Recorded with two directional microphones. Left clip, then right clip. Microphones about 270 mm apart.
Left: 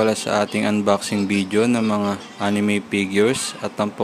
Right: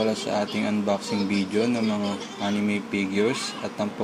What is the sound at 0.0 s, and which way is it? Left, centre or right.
Speech, left.